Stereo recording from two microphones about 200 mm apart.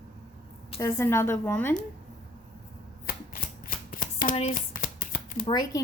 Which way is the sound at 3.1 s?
45° left (ahead or behind).